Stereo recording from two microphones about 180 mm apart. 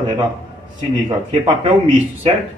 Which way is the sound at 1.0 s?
30° right (ahead or behind).